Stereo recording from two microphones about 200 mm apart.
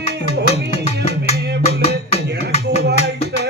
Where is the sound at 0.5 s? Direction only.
30° left (ahead or behind).